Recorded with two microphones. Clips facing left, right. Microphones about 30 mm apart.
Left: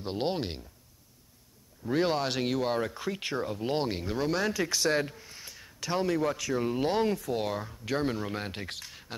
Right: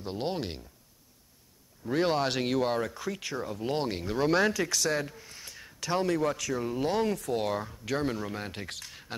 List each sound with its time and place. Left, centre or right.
0.0 s speech: left
1.9 s speech: centre
2.8 s speech: centre
3.2 s speech: left
3.4 s speech: centre
4.6 s speech: centre
5.1 s speech: centre